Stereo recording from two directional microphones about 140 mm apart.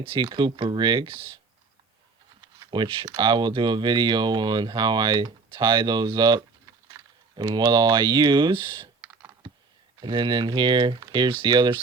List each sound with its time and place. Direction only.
0.0 s speech: 35° right (ahead or behind)
2.6 s speech: 35° right (ahead or behind)
10.0 s speech: 35° right (ahead or behind)